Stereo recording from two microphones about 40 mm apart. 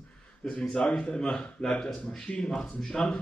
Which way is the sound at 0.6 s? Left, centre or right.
Left.